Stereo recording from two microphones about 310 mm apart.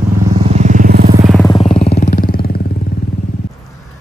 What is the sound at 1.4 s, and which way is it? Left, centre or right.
Vehicle, centre.